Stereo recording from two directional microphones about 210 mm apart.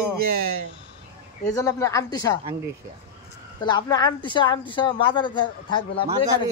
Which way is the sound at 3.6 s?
20° left (ahead or behind).